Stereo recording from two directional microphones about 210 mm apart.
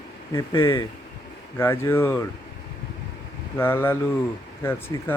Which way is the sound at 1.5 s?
10° left (ahead or behind).